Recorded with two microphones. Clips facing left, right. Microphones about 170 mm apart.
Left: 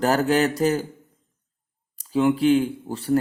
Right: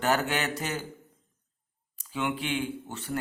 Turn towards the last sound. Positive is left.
turn(degrees=35)  # may be behind; listen again after turning